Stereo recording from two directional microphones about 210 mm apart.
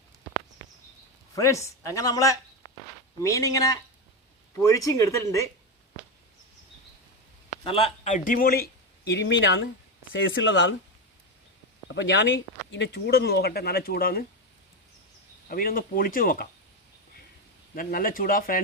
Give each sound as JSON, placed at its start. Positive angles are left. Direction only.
{"t": 0.6, "sound": "a sound", "side_deg": 15}
{"t": 1.4, "sound": "speech", "side_deg": 15}
{"t": 2.6, "sound": "walk", "side_deg": 20}
{"t": 3.2, "sound": "speech", "side_deg": 15}
{"t": 7.5, "sound": "speech", "side_deg": 25}
{"t": 11.9, "sound": "speech", "side_deg": 60}
{"t": 15.4, "sound": "speech", "side_deg": 45}
{"t": 17.7, "sound": "speech", "side_deg": 40}